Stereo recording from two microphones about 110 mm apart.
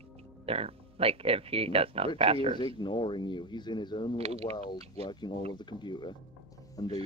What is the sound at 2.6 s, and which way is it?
Mantra, 45° left (ahead or behind).